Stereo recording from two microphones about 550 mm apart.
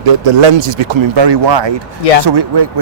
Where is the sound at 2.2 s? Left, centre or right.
Right.